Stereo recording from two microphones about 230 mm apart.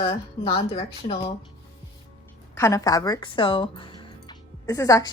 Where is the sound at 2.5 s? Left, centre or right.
Centre.